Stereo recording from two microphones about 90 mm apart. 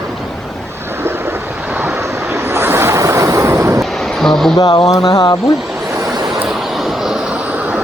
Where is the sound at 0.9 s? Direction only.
25° right (ahead or behind).